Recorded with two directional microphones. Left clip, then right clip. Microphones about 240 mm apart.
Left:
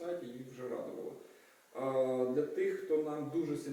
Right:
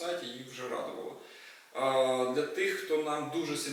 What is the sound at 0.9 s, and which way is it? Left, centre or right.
Speech, left.